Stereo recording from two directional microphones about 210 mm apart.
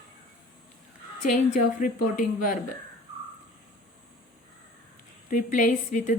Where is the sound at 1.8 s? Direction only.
40° left (ahead or behind).